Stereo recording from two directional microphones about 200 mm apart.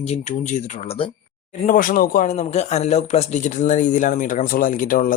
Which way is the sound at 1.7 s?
45° left (ahead or behind).